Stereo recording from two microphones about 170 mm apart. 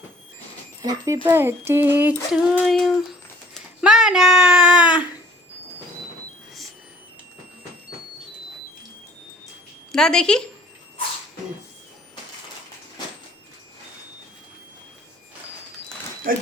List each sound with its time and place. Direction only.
0.8 s speech: 20° right (ahead or behind)
9.9 s speech: 5° left (ahead or behind)
16.3 s speech: 55° right (ahead or behind)